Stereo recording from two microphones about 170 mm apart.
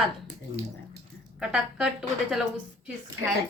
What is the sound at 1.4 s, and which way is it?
A woman's voice, 5° right (ahead or behind).